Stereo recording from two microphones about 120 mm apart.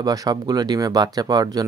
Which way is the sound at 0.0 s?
30° right (ahead or behind).